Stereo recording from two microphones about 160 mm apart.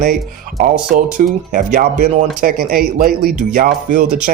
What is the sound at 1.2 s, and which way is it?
Speech, 55° right (ahead or behind).